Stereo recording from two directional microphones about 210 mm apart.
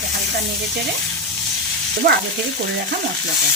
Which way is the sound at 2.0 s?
45° right (ahead or behind).